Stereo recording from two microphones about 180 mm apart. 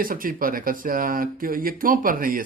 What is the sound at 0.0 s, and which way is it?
Speech, 50° right (ahead or behind).